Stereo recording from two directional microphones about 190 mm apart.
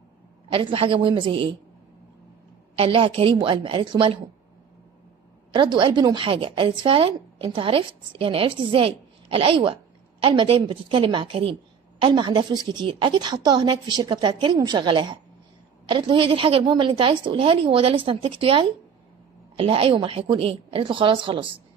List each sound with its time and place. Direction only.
0.5 s a woman's voice: 30° right (ahead or behind)
2.8 s a woman's voice: 30° right (ahead or behind)
5.5 s a woman's voice: 25° right (ahead or behind)